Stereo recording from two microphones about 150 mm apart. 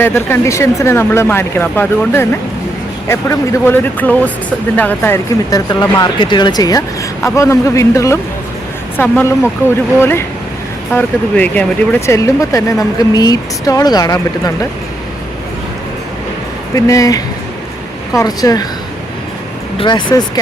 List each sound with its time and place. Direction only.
0.0 s speech: 15° left (ahead or behind)
16.7 s speech: 20° left (ahead or behind)
19.8 s speech: 30° left (ahead or behind)